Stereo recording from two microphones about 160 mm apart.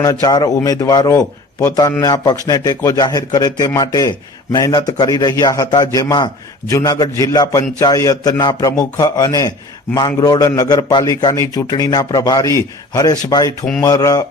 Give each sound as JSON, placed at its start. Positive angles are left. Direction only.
{"t": 0.0, "sound": "a man's voice", "side_deg": 25}